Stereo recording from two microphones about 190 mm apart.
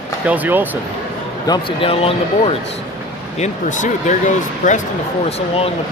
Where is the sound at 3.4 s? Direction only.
40° left (ahead or behind).